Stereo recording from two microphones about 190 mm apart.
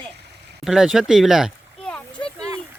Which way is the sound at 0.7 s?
Centre (ahead or behind).